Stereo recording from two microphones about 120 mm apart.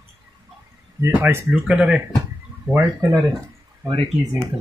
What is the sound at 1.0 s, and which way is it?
Speech, 20° right (ahead or behind).